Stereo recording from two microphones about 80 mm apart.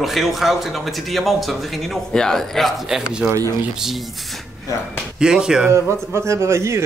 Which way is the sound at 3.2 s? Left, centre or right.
Centre.